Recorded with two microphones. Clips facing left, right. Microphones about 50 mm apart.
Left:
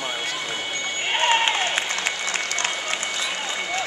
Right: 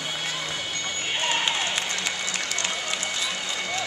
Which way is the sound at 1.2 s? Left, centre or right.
Left.